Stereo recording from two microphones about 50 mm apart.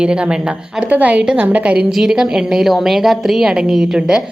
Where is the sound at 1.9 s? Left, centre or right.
Centre.